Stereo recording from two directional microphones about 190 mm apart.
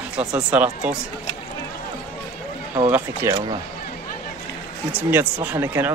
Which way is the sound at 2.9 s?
15° right (ahead or behind).